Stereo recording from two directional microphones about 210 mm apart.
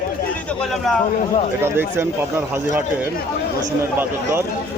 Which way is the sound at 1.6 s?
10° right (ahead or behind).